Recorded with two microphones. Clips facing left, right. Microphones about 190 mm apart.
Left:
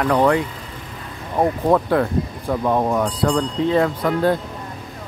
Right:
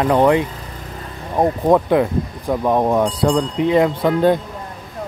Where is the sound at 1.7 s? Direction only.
15° right (ahead or behind).